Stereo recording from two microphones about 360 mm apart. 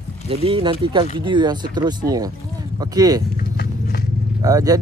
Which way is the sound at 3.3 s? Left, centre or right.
Left.